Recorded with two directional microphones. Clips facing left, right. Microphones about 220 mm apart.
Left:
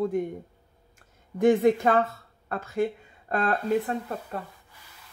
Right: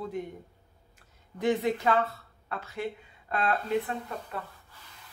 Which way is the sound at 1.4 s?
50° left (ahead or behind).